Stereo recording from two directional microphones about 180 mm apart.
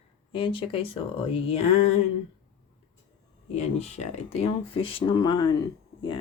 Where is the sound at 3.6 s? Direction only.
35° left (ahead or behind).